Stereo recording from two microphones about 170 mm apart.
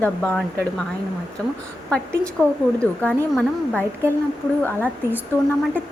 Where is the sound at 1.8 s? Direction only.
5° left (ahead or behind).